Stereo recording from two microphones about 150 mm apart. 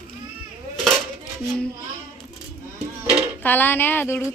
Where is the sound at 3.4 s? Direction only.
10° left (ahead or behind).